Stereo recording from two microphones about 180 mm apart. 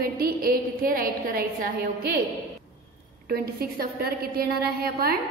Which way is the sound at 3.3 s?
55° right (ahead or behind).